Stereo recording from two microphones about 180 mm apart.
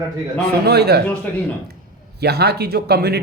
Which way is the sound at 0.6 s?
65° right (ahead or behind).